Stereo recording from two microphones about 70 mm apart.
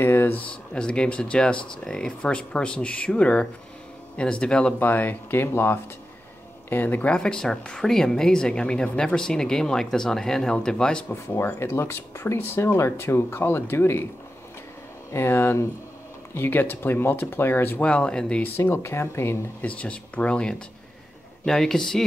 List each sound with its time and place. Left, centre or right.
0.0 s speech: left
0.4 s speech: centre
4.7 s speech: left; by 11.1 s centre
11.1 s speech: left
15.1 s speech: left
17.7 s speech: centre
18.6 s speech: left
19.6 s speech: centre